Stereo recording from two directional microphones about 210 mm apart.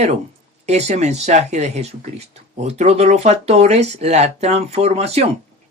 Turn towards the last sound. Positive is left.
turn(degrees=-30)  # may be behind; listen again after turning